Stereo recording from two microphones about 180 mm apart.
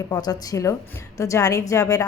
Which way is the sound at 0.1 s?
20° left (ahead or behind).